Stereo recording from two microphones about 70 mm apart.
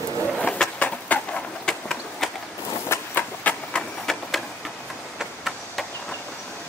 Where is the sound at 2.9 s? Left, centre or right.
Left.